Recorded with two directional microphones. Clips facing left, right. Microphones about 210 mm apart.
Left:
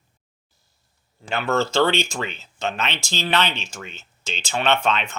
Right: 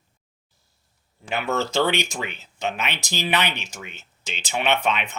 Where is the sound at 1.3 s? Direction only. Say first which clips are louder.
Left 2 dB; 15° right (ahead or behind).